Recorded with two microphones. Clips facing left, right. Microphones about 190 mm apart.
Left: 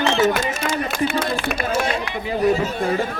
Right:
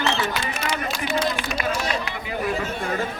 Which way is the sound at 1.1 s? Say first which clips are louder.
Left 2 dB; 55° left (ahead or behind).